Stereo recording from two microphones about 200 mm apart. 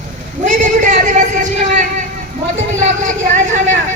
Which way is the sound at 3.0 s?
40° right (ahead or behind).